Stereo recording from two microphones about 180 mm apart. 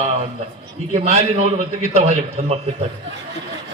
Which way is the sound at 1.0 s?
35° right (ahead or behind).